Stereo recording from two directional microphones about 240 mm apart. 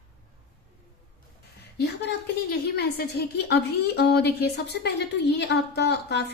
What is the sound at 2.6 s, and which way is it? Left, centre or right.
A woman's voice, left.